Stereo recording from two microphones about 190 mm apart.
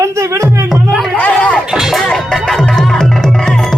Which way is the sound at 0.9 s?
Centre (ahead or behind).